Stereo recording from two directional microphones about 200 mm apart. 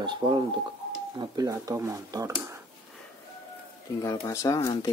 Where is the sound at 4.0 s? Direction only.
15° left (ahead or behind).